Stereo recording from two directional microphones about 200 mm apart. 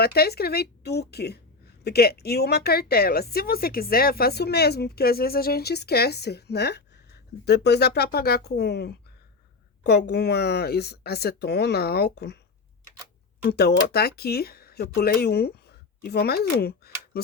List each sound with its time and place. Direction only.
0.0 s a woman's voice: 50° left (ahead or behind)
10.1 s speech: 55° left (ahead or behind)
13.4 s speech: 55° left (ahead or behind)